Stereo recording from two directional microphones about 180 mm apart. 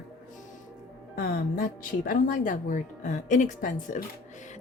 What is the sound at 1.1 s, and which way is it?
Speech, 55° left (ahead or behind).